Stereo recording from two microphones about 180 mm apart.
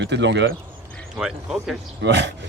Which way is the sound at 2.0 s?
75° right (ahead or behind).